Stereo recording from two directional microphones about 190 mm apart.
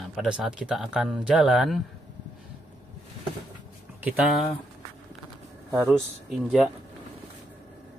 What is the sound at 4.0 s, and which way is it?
Speech, 5° right (ahead or behind).